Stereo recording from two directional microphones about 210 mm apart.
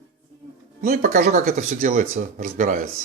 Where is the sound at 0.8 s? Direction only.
35° right (ahead or behind).